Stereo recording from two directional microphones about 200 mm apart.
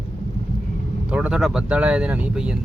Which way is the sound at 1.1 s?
5° right (ahead or behind).